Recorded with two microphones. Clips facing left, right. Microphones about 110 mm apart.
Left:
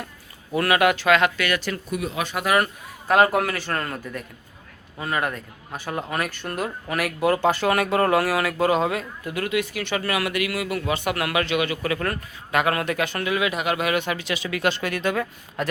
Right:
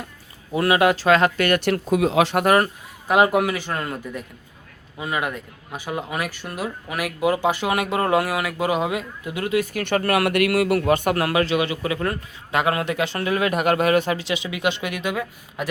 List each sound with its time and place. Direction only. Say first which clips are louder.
0.5 s a man's voice: right 2 dB; 25° right (ahead or behind); by 1.6 s 45° right (ahead or behind)
1.6 s speech: right 8 dB; 80° right
2.4 s a man's voice: right 1 dB; 40° right (ahead or behind)
3.1 s a man's voice: right 1 dB; 15° right (ahead or behind)
9.5 s a man's voice: right 5 dB; 35° right (ahead or behind)
9.8 s a man's voice: right 5 dB; 50° right (ahead or behind); by 15.6 s 10° right (ahead or behind)